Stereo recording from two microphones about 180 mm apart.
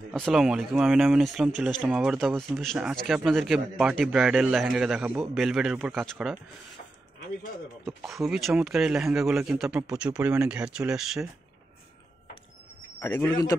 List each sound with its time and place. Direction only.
0.1 s speech: centre (ahead or behind)
8.1 s speech: centre (ahead or behind)
13.0 s speech: 10° left (ahead or behind)